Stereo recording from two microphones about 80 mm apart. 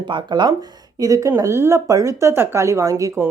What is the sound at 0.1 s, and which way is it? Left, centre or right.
Speech, right.